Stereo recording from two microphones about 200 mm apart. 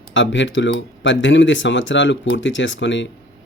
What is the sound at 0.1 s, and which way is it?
Speech, 65° left (ahead or behind).